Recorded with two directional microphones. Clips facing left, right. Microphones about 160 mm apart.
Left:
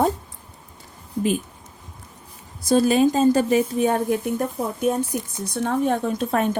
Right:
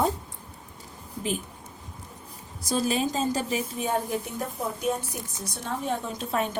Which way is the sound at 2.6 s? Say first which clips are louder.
Left 9 dB; 60° left (ahead or behind).